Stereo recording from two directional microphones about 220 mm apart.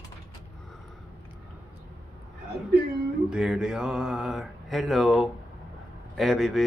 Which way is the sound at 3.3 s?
5° right (ahead or behind).